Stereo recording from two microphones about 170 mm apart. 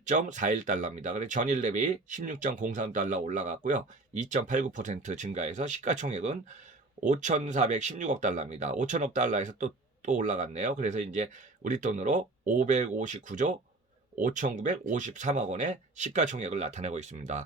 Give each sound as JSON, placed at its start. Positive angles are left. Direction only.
{"t": 0.0, "sound": "speech", "side_deg": -45}